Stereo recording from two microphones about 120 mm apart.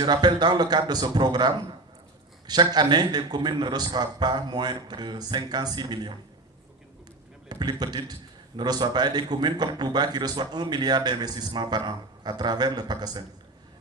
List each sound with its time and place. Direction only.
0.0 s a man's voice: 35° right (ahead or behind)
7.4 s a man's voice: 35° right (ahead or behind)